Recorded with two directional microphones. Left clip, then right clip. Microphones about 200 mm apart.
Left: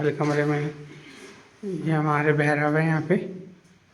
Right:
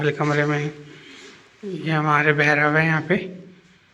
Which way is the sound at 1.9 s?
10° left (ahead or behind).